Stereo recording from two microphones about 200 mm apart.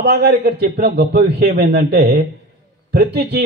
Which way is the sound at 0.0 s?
55° right (ahead or behind).